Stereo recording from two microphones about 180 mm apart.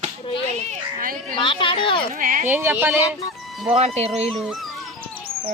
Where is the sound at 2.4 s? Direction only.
10° right (ahead or behind).